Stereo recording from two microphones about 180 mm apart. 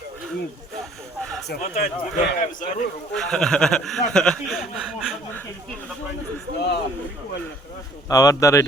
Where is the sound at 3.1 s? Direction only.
5° left (ahead or behind).